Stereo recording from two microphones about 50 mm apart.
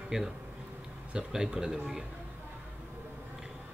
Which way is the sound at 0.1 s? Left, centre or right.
Centre.